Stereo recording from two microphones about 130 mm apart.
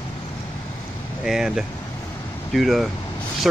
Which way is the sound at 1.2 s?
5° right (ahead or behind).